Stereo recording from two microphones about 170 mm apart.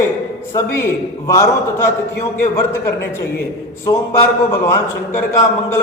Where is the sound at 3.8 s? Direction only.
15° left (ahead or behind).